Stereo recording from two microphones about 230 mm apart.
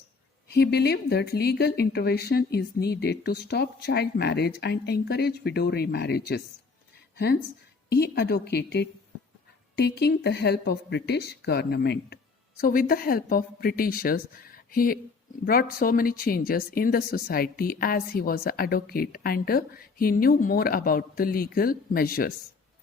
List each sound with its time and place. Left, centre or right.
0.4 s speech: left
7.9 s speech: left